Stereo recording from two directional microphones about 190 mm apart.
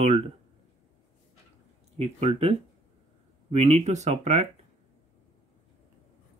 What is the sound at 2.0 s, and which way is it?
Speech, 30° right (ahead or behind).